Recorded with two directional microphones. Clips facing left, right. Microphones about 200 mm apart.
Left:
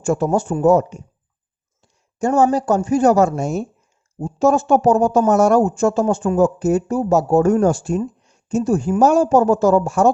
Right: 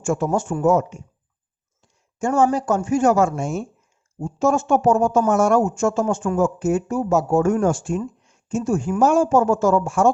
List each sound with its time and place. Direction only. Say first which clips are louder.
0.0 s speech: left 3 dB; 35° left (ahead or behind)